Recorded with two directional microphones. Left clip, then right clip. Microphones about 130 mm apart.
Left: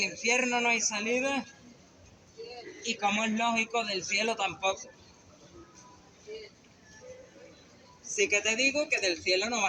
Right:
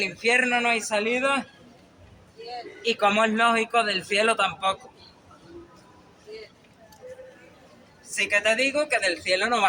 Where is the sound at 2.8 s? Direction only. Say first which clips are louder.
Right 8 dB; 35° right (ahead or behind).